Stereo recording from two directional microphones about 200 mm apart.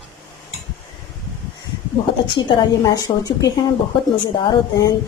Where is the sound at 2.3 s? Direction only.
20° left (ahead or behind).